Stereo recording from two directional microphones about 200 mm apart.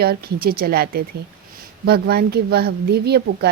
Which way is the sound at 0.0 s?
50° right (ahead or behind).